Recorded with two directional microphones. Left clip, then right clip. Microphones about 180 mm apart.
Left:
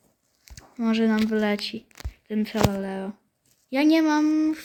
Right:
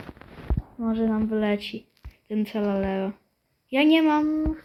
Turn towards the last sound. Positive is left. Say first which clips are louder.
# left 3 dB
turn(degrees=45)  # may be behind; listen again after turning